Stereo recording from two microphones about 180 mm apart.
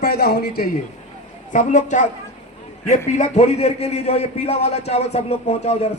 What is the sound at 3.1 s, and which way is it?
A man's voice, 40° left (ahead or behind).